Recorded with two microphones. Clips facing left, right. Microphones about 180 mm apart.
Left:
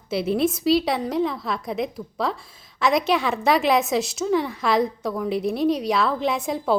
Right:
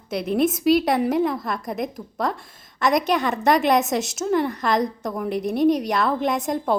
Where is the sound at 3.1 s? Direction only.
Centre (ahead or behind).